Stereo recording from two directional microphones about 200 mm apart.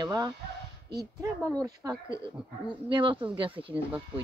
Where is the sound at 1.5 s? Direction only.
15° right (ahead or behind).